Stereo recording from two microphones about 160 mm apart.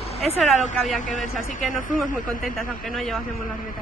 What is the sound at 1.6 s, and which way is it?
Speech, 55° left (ahead or behind).